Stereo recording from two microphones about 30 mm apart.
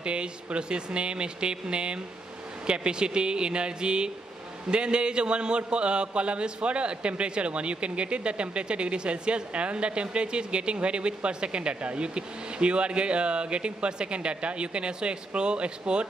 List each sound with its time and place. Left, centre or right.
0.0 s a man's voice: right